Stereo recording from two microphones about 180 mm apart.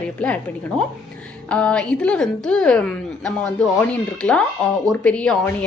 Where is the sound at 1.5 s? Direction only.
5° left (ahead or behind).